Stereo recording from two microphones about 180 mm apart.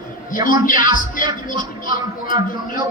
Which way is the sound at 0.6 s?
50° left (ahead or behind).